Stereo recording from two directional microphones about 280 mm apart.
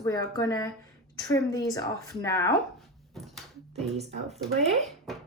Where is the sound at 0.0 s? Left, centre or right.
Centre.